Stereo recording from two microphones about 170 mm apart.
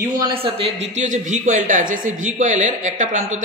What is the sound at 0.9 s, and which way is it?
Speech, 45° right (ahead or behind).